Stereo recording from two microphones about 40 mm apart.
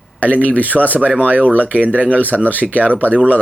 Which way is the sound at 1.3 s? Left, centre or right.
Right.